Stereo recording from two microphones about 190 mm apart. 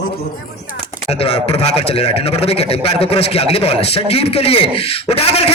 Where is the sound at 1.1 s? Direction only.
30° left (ahead or behind).